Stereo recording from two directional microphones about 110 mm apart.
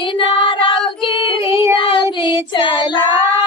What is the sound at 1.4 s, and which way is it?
Child singing, 25° right (ahead or behind).